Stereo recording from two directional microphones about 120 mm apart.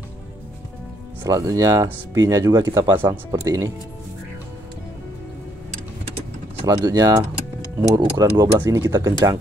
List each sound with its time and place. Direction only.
1.2 s speech: 30° right (ahead or behind)
6.6 s speech: 35° right (ahead or behind)